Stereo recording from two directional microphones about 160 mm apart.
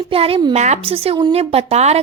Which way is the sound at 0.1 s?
35° right (ahead or behind).